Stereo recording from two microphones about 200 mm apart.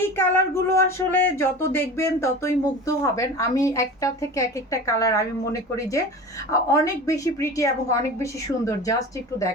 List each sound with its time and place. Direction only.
0.2 s speech: 10° left (ahead or behind)